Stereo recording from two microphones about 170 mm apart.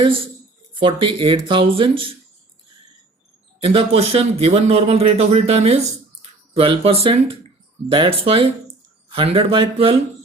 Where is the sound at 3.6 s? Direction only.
35° right (ahead or behind).